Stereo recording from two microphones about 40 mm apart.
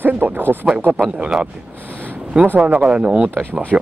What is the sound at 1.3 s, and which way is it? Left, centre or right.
Speech, centre.